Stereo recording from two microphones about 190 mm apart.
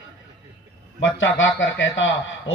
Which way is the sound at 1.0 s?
80° left.